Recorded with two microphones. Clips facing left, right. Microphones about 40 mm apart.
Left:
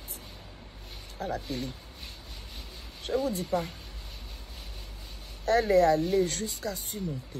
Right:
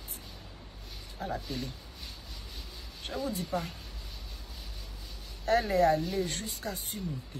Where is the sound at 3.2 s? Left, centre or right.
Left.